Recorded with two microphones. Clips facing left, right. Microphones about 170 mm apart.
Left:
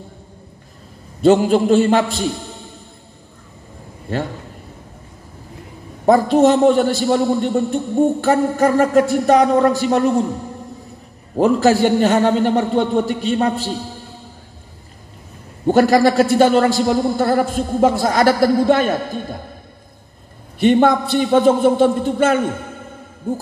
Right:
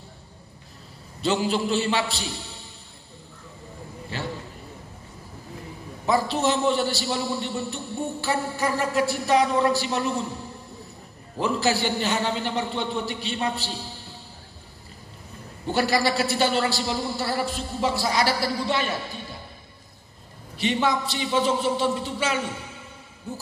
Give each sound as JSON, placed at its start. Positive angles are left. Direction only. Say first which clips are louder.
{"t": 1.2, "sound": "a man's voice", "louder": "left 11 dB", "side_deg": 50}
{"t": 4.1, "sound": "a man's voice", "louder": "left 11 dB", "side_deg": 50}
{"t": 6.0, "sound": "a man's voice", "louder": "left 11 dB", "side_deg": 50}
{"t": 15.6, "sound": "a man's voice", "louder": "left 11 dB", "side_deg": 50}
{"t": 20.5, "sound": "a man's voice", "louder": "left 11 dB", "side_deg": 55}